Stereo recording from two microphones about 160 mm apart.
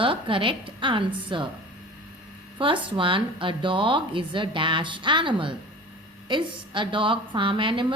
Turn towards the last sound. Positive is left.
turn(degrees=-30)  # may be behind; listen again after turning